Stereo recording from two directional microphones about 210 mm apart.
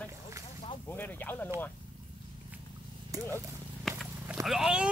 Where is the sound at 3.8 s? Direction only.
Centre (ahead or behind).